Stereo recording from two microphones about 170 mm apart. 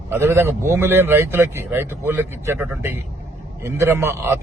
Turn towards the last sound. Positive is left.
turn(degrees=-15)  # may be behind; listen again after turning